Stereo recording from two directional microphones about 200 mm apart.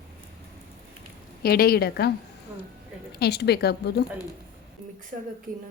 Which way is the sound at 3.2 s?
55° left (ahead or behind).